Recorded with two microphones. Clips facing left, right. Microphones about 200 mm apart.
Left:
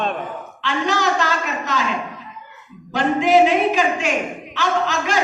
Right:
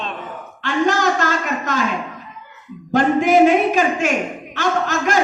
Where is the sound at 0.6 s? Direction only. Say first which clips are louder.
Right 3 dB; 45° right (ahead or behind).